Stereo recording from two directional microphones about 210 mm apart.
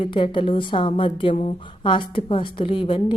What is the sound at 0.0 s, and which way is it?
A woman's voice, 25° left (ahead or behind).